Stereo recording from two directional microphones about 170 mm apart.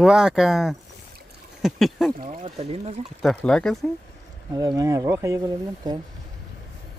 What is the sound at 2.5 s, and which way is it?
Speech, 35° right (ahead or behind).